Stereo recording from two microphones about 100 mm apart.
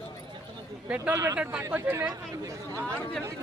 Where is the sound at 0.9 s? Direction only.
25° right (ahead or behind).